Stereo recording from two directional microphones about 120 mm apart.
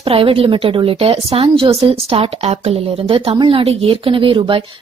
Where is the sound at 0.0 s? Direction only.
50° right (ahead or behind).